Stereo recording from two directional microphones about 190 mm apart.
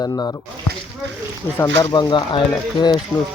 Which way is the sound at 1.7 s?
25° left (ahead or behind).